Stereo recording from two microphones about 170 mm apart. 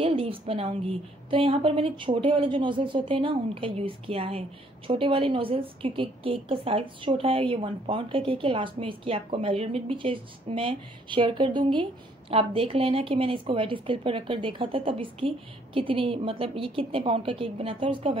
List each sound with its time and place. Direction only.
0.0 s a woman's voice: 30° right (ahead or behind)